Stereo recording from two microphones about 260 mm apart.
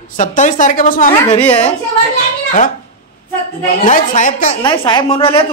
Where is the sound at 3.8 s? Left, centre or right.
Left.